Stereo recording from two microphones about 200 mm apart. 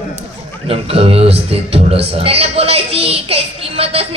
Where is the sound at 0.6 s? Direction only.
30° right (ahead or behind).